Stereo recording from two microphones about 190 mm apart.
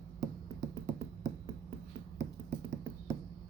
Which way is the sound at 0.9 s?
40° right (ahead or behind).